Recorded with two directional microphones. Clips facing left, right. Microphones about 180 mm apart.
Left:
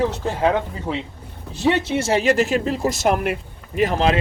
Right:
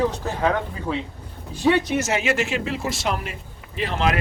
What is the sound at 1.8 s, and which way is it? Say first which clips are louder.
Speech: left 4 dB; 30° left (ahead or behind).